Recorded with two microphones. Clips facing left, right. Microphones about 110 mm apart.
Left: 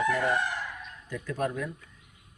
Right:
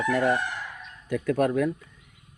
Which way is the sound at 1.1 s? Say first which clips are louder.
Right 8 dB; 65° right (ahead or behind).